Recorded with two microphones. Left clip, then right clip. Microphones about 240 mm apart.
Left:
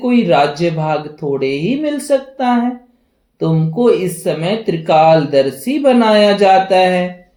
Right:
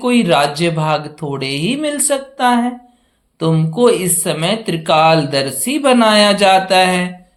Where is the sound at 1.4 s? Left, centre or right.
Right.